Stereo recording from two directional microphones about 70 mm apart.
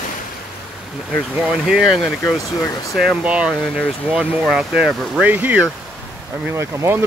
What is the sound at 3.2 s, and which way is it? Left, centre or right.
Speech, centre.